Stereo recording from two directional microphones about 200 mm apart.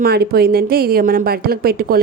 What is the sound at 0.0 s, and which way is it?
A woman's voice, 50° right (ahead or behind).